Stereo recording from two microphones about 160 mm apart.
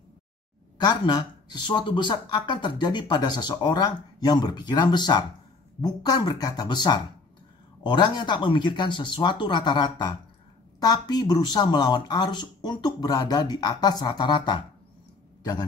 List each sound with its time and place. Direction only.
0.7 s speech: 25° left (ahead or behind)